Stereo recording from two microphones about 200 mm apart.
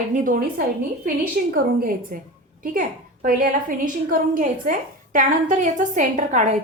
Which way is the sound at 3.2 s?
45° right (ahead or behind).